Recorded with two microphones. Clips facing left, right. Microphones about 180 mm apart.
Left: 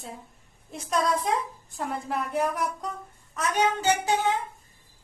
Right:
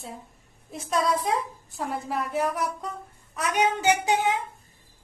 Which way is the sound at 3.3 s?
15° right (ahead or behind).